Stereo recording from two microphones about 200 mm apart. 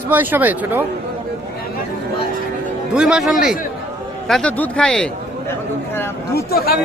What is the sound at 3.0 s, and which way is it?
Speech, 5° right (ahead or behind).